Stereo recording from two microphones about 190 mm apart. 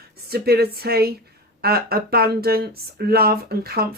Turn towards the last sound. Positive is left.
turn(degrees=-55)  # may be behind; listen again after turning